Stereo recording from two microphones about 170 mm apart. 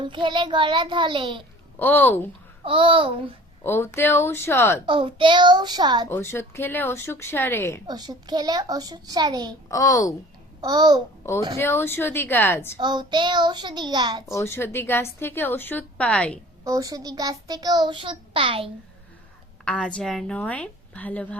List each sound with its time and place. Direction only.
0.0 s a child's voice: 30° right (ahead or behind)
1.8 s a woman's voice: 10° left (ahead or behind)
2.6 s a child's voice: 30° right (ahead or behind)
3.6 s a woman's voice: 15° left (ahead or behind)
4.9 s a child's voice: 30° right (ahead or behind)
6.1 s a woman's voice: 15° left (ahead or behind)
7.9 s a child's voice: 25° right (ahead or behind)
9.6 s a child's voice: 20° left (ahead or behind)
10.6 s a child's voice: 25° right (ahead or behind)
11.5 s a woman's voice: 15° left (ahead or behind)
12.8 s a child's voice: 25° right (ahead or behind)
14.3 s a woman's voice: 15° left (ahead or behind)
16.6 s a child's voice: 20° right (ahead or behind)
19.6 s a woman's voice: 5° left (ahead or behind)